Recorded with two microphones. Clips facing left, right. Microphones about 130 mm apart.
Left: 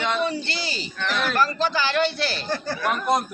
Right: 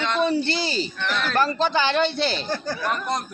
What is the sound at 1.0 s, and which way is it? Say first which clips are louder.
Speech: left 1 dB; 5° left (ahead or behind).